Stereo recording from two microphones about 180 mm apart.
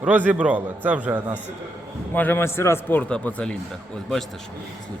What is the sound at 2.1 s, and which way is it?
A man's voice, 10° left (ahead or behind).